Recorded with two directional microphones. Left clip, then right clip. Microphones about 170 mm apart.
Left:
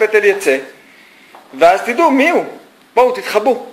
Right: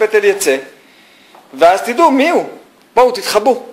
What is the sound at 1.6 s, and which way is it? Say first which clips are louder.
Speech: right 1 dB; 15° right (ahead or behind).